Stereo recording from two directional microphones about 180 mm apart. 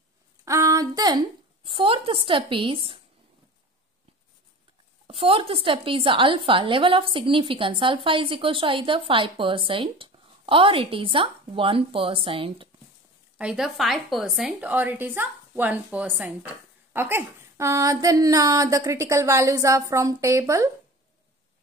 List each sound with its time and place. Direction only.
0.5 s a woman's voice: 20° right (ahead or behind)
5.0 s a woman's voice: 30° right (ahead or behind)
13.4 s speech: 5° right (ahead or behind)